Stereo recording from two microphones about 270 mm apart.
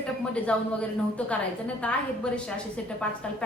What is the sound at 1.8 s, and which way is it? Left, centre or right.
Speech, centre.